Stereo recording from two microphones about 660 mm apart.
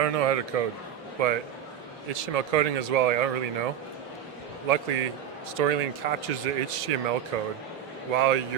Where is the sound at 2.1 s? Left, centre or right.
Right.